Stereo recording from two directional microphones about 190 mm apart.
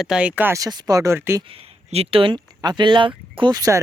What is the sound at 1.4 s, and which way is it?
Speech, 30° right (ahead or behind).